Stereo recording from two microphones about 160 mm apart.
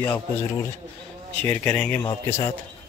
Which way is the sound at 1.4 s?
10° left (ahead or behind).